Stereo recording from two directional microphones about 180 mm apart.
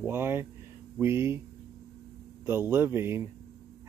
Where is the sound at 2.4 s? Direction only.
10° right (ahead or behind).